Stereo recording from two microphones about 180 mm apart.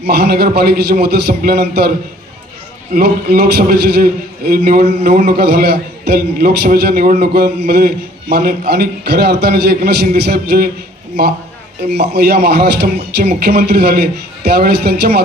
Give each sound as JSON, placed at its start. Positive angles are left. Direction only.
{"t": 0.0, "sound": "a man's voice", "side_deg": -65}
{"t": 2.9, "sound": "a man's voice", "side_deg": -60}
{"t": 11.8, "sound": "a man's voice", "side_deg": -65}